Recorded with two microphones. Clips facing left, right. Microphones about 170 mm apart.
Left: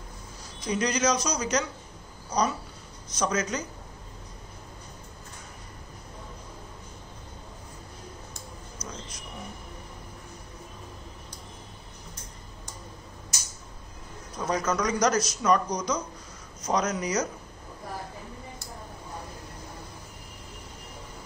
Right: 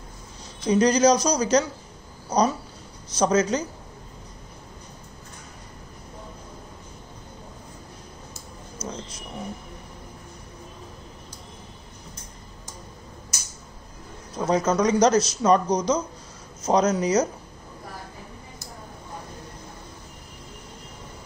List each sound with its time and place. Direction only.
0.7 s speech: 35° right (ahead or behind)
8.8 s a sound: 30° right (ahead or behind)
14.4 s speech: 25° right (ahead or behind)